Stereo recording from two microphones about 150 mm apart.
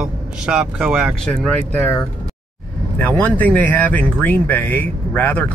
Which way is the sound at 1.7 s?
15° left (ahead or behind).